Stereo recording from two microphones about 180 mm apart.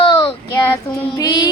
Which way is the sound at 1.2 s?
20° left (ahead or behind).